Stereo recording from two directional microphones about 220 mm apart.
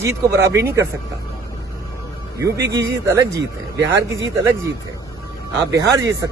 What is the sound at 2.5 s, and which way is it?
Speech, 45° right (ahead or behind).